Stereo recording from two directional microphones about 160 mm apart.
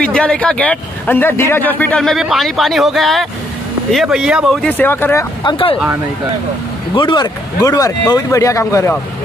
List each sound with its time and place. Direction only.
0.0 s speech: 5° left (ahead or behind)
5.4 s speech: 30° left (ahead or behind)
7.0 s speech: 30° left (ahead or behind)